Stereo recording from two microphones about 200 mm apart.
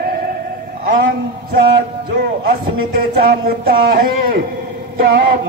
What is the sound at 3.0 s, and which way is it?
Speech, 45° right (ahead or behind).